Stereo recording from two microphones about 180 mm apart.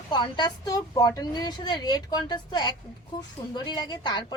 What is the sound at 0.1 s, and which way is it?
A woman's voice, 25° left (ahead or behind).